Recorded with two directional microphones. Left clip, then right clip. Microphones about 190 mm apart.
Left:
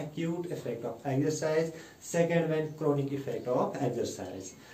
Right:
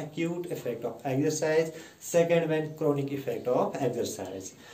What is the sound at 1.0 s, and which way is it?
Speech, 25° left (ahead or behind).